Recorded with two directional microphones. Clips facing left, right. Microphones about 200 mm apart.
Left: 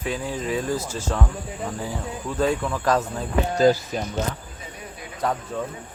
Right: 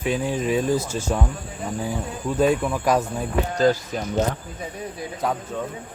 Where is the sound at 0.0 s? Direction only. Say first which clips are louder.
Right 4 dB; 20° right (ahead or behind).